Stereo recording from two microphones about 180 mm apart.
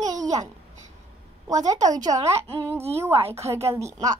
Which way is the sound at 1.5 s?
20° right (ahead or behind).